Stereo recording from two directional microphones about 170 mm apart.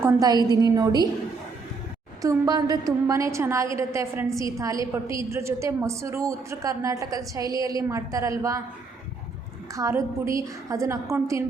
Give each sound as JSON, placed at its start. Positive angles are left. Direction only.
{"t": 0.0, "sound": "a woman's voice", "side_deg": -20}
{"t": 2.2, "sound": "a woman's voice", "side_deg": -20}
{"t": 9.7, "sound": "a woman's voice", "side_deg": -20}